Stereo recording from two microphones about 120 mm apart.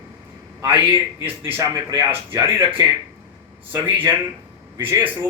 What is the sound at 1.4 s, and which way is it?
A man's voice, 20° right (ahead or behind).